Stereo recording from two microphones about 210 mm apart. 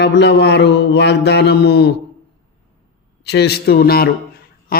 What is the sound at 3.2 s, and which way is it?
Speech, 50° left (ahead or behind).